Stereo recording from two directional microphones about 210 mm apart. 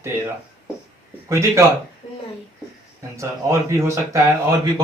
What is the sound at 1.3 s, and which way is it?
Speech, 15° right (ahead or behind).